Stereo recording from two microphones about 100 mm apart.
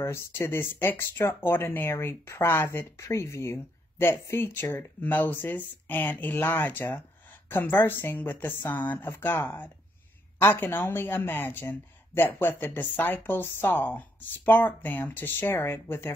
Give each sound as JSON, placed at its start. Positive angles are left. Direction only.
{"t": 0.0, "sound": "speech", "side_deg": 25}